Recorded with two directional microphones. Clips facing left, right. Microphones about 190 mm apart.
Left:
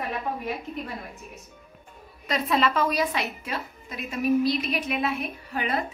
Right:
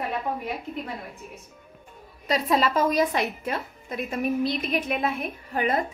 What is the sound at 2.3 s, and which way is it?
A woman's voice, 35° right (ahead or behind).